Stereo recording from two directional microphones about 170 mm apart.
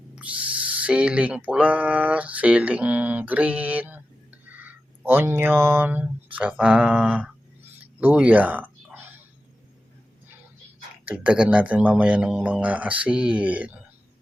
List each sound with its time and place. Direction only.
0.2 s speech: 10° right (ahead or behind)
11.0 s speech: 10° right (ahead or behind)